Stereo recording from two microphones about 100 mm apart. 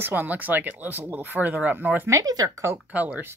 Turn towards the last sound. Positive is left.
turn(degrees=-15)  # may be behind; listen again after turning